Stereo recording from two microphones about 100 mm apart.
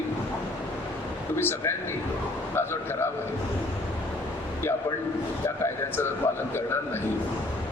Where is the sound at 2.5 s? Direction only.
25° left (ahead or behind).